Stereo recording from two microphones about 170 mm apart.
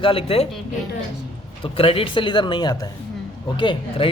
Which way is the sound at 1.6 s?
35° left (ahead or behind).